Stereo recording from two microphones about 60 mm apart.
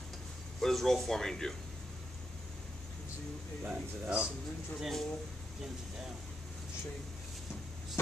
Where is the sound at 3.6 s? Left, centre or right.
Right.